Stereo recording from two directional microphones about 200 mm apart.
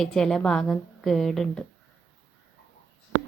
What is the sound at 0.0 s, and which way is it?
A woman's voice, centre (ahead or behind).